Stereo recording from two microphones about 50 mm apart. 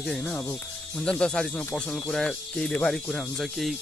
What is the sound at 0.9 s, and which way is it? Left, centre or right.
Speech, left.